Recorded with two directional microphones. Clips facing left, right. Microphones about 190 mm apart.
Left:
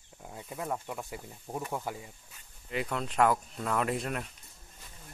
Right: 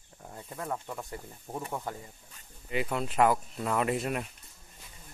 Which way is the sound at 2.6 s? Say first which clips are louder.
Right 2 dB; 5° right (ahead or behind).